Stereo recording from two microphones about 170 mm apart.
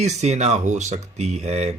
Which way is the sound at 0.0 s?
40° right (ahead or behind).